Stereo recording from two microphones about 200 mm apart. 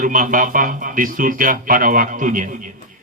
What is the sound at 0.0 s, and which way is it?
A man's voice, 40° right (ahead or behind).